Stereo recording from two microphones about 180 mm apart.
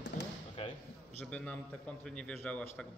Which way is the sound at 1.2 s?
5° left (ahead or behind).